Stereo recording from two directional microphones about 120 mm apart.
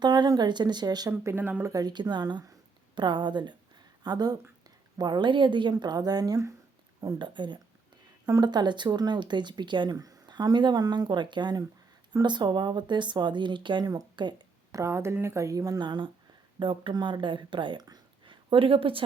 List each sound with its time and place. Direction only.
0.0 s speech: 40° right (ahead or behind)
1.2 s speech: 20° right (ahead or behind)
1.7 s speech: 35° right (ahead or behind)
18.5 s speech: 50° right (ahead or behind)